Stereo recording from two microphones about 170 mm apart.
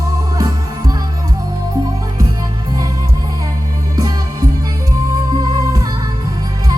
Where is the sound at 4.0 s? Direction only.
20° right (ahead or behind).